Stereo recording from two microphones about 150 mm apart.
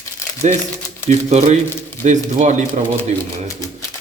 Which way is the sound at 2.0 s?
55° right (ahead or behind).